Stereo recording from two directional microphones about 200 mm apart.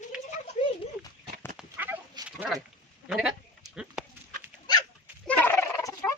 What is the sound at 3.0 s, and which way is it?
Speech, 5° right (ahead or behind).